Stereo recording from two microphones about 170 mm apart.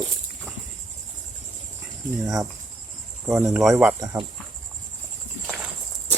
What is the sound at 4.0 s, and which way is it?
Speech, 20° right (ahead or behind).